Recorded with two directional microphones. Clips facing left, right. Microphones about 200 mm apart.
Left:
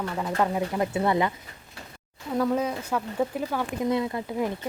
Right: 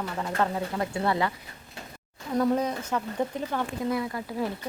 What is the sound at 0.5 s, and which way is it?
Speech, 20° left (ahead or behind).